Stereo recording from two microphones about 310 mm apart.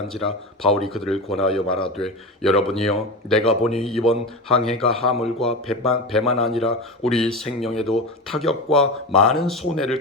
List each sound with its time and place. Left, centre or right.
0.1 s speech: centre